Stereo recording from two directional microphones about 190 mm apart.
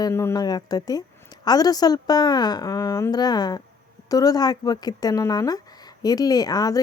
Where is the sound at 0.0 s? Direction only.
15° left (ahead or behind).